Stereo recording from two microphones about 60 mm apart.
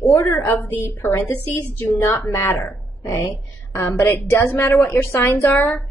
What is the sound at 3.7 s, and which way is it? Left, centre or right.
Speech, left.